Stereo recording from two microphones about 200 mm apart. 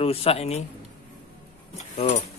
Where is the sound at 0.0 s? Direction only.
30° left (ahead or behind).